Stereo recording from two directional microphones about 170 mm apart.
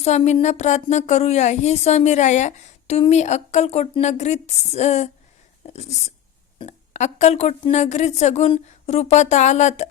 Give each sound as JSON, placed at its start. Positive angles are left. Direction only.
{"t": 0.0, "sound": "a woman's voice", "side_deg": 40}